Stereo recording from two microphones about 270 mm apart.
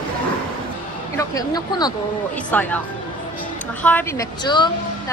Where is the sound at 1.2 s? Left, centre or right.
Centre.